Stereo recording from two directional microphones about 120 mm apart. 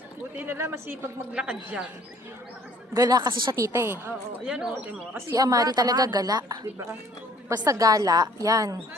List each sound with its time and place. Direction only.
0.3 s speech: 20° right (ahead or behind)
2.9 s a woman's voice: 30° right (ahead or behind)
3.5 s a woman's voice: 25° right (ahead or behind)
4.4 s speech: 10° right (ahead or behind)
5.3 s a woman's voice: 30° right (ahead or behind)